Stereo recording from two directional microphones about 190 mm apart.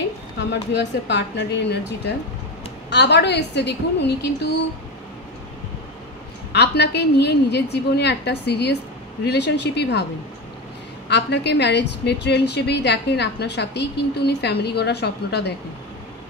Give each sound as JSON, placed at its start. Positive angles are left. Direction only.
{"t": 0.4, "sound": "a woman's voice", "side_deg": 65}
{"t": 6.5, "sound": "a woman's voice", "side_deg": 60}
{"t": 11.1, "sound": "a woman's voice", "side_deg": 65}